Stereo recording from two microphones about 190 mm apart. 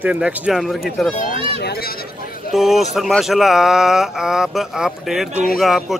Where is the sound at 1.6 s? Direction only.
55° left (ahead or behind).